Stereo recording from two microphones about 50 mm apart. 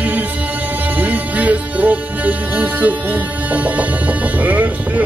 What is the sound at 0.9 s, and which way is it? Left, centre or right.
Speech, right.